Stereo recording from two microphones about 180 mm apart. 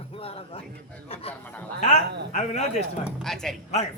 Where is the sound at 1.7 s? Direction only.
40° left (ahead or behind).